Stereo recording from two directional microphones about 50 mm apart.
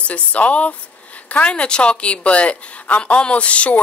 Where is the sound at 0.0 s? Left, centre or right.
Left.